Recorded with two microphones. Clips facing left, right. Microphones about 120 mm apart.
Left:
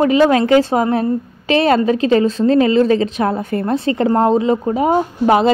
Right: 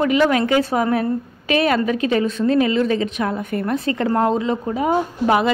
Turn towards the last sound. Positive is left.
turn(degrees=25)  # may be behind; listen again after turning